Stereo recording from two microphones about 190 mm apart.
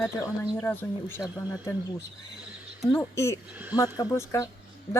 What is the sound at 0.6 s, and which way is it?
Speech, 10° left (ahead or behind).